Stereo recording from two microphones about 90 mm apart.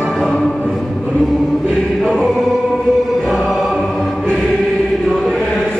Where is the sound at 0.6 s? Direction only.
10° left (ahead or behind).